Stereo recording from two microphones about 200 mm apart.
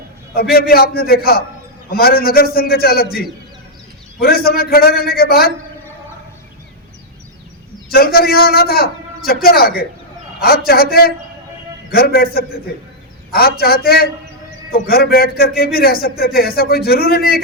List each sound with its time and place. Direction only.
0.3 s a man's voice: 50° left (ahead or behind)
7.9 s a man's voice: 50° left (ahead or behind)